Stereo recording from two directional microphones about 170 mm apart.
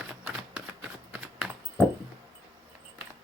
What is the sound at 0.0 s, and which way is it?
Typing, 5° right (ahead or behind).